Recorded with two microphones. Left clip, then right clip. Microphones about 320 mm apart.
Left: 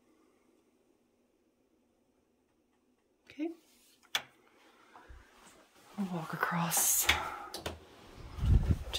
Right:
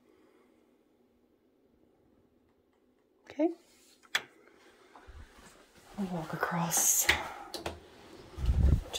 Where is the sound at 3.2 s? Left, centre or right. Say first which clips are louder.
Right 9 dB; centre.